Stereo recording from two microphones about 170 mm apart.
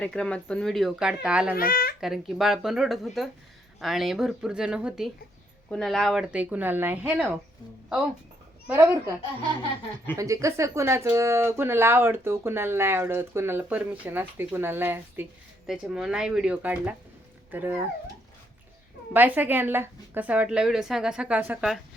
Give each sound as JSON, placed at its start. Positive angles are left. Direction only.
{"t": 0.0, "sound": "speech", "side_deg": 5}
{"t": 1.5, "sound": "speech", "side_deg": 60}
{"t": 2.0, "sound": "speech", "side_deg": 0}
{"t": 8.6, "sound": "speech", "side_deg": -10}
{"t": 10.2, "sound": "speech", "side_deg": -20}
{"t": 19.1, "sound": "speech", "side_deg": -10}